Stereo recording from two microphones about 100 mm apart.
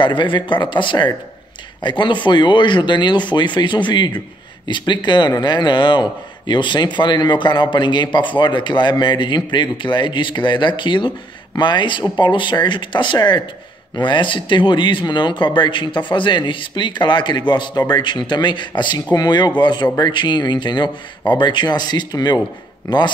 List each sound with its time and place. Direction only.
0.0 s a man's voice: 55° left (ahead or behind)